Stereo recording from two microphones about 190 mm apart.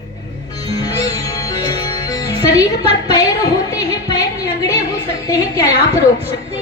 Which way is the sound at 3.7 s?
20° left (ahead or behind).